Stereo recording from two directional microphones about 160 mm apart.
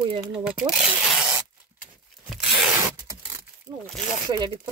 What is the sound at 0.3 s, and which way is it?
Speech, 5° right (ahead or behind).